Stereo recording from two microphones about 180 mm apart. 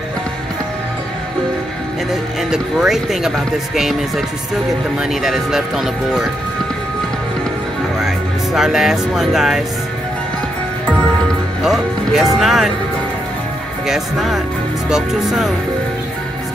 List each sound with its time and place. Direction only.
2.5 s speech: centre (ahead or behind)
5.2 s speech: centre (ahead or behind)
8.5 s speech: centre (ahead or behind)
11.6 s speech: centre (ahead or behind)
13.8 s speech: centre (ahead or behind)